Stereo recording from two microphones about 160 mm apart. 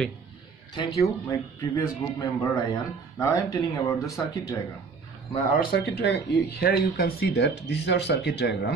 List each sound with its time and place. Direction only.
0.7 s speech: 20° left (ahead or behind)
5.5 s speech: 65° left (ahead or behind); by 8.7 s 90° left